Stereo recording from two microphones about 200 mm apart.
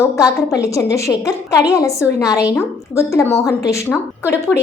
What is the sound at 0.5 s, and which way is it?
A woman's voice, 15° left (ahead or behind).